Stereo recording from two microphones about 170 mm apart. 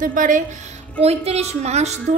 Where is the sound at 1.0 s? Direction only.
40° right (ahead or behind).